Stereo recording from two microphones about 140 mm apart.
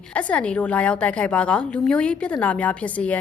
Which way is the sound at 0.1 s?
10° left (ahead or behind).